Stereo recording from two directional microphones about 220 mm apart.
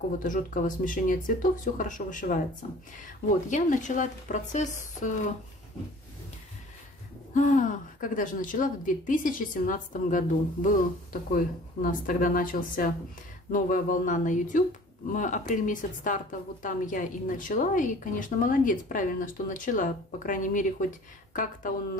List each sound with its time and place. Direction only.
0.2 s a woman's voice: 35° left (ahead or behind)
3.4 s a woman's voice: 35° left (ahead or behind)
7.3 s a woman's voice: 35° left (ahead or behind)